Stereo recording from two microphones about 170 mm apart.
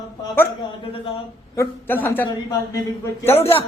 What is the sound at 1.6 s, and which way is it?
A man's voice, 10° left (ahead or behind).